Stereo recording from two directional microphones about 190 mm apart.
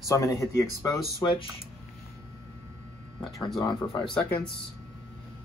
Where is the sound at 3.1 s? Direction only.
Centre (ahead or behind).